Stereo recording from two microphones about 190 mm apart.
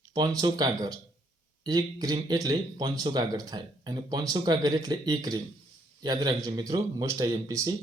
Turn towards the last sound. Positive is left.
turn(degrees=-20)  # may be behind; listen again after turning